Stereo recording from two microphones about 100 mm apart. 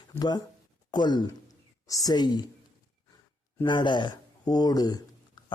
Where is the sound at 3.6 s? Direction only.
50° left (ahead or behind).